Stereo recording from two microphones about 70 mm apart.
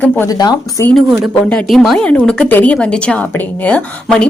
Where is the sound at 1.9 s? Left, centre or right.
Centre.